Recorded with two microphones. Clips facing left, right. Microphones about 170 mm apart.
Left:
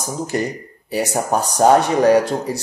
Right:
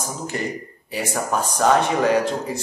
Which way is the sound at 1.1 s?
35° left (ahead or behind).